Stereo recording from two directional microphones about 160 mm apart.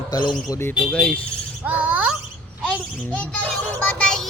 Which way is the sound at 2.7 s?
10° left (ahead or behind).